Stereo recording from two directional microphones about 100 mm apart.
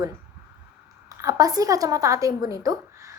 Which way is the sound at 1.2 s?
35° right (ahead or behind).